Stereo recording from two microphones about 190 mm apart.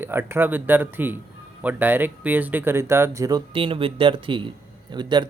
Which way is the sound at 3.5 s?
30° right (ahead or behind).